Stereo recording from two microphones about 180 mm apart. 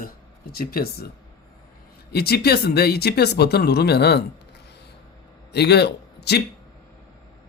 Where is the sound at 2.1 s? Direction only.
60° left (ahead or behind).